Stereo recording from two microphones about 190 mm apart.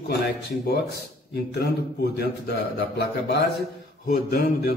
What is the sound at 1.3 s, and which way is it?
A man's voice, 55° left (ahead or behind).